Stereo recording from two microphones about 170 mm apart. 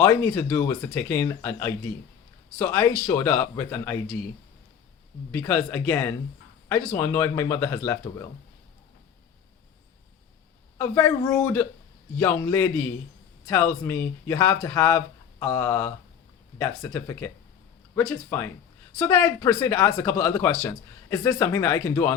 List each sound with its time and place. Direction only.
0.0 s speech: 15° left (ahead or behind)
5.3 s speech: 10° left (ahead or behind)
10.8 s speech: 20° left (ahead or behind)